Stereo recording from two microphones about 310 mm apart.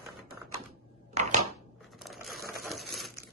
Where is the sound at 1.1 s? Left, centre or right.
Right.